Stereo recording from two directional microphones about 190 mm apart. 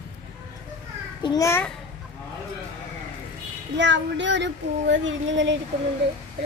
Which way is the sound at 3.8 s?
70° right (ahead or behind).